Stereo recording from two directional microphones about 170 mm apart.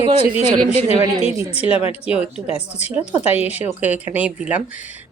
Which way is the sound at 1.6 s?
35° left (ahead or behind).